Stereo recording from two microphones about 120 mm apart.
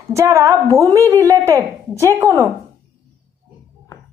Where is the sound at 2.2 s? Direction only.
25° right (ahead or behind).